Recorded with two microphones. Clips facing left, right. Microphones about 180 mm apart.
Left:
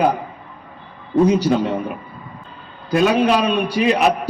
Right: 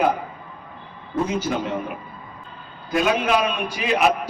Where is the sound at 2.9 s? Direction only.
35° left (ahead or behind).